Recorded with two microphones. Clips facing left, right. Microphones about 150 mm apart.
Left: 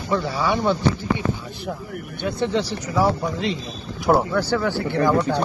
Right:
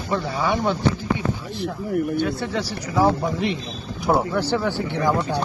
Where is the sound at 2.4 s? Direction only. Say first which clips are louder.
Left 4 dB; 20° left (ahead or behind).